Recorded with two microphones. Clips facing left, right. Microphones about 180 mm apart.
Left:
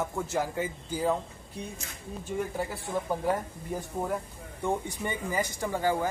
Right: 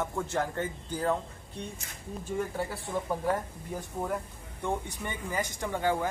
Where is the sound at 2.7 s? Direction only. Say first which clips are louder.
Left 1 dB; 10° left (ahead or behind).